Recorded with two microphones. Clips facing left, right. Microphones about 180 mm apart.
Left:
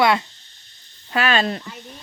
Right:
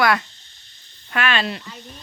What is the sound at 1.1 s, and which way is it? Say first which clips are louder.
Speech: left 3 dB; 35° left (ahead or behind).